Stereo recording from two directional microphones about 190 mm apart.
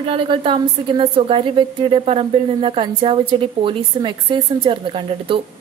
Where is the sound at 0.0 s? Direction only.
30° right (ahead or behind).